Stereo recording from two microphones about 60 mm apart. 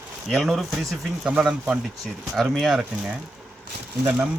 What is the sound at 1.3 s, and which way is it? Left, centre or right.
Speech, centre.